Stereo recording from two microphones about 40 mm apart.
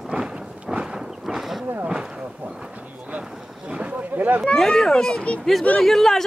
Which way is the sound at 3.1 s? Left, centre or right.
Right.